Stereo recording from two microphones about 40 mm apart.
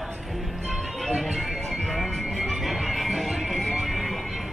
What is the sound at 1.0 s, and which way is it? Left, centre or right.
Music, centre.